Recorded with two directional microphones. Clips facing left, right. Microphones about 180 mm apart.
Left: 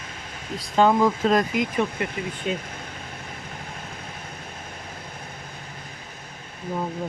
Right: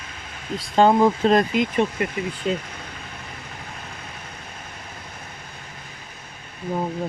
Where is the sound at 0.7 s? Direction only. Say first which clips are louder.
Right 2 dB; 30° right (ahead or behind).